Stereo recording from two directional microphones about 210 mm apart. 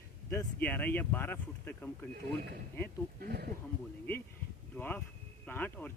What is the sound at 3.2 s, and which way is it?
Speech, 50° right (ahead or behind).